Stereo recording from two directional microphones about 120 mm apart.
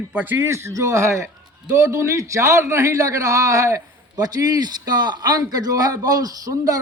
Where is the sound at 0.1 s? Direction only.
15° right (ahead or behind).